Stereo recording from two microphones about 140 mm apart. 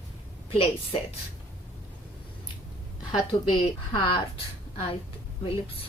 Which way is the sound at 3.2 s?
30° left (ahead or behind).